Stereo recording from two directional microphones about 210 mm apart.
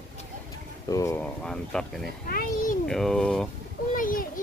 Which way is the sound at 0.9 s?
15° left (ahead or behind).